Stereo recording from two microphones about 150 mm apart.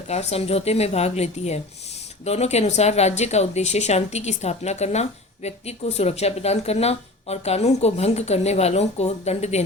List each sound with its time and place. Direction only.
0.1 s a woman's voice: 45° left (ahead or behind)